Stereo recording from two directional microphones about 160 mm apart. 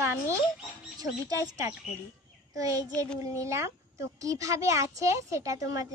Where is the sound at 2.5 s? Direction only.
20° right (ahead or behind).